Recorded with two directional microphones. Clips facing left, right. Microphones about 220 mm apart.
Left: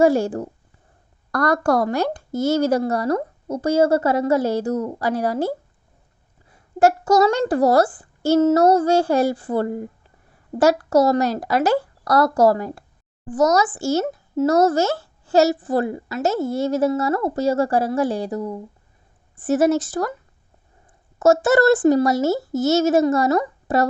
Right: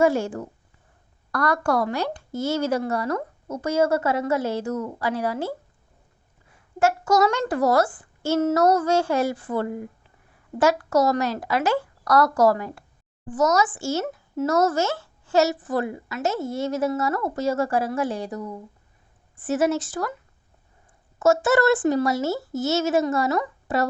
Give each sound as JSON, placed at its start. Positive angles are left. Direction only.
{"t": 0.0, "sound": "a child's voice", "side_deg": 35}
{"t": 6.7, "sound": "a child's voice", "side_deg": 35}
{"t": 21.2, "sound": "a child's voice", "side_deg": 40}